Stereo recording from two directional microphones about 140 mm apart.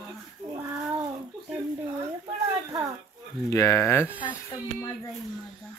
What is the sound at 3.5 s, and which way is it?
Speech, 20° left (ahead or behind).